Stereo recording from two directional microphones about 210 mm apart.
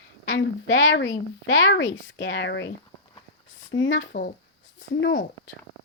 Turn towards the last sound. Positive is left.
turn(degrees=60)  # may be behind; listen again after turning